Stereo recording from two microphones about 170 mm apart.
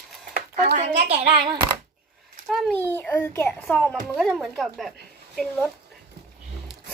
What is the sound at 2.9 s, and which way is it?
A child's voice, 10° left (ahead or behind).